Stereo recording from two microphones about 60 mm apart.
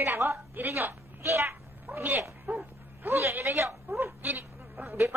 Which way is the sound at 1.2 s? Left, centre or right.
Right.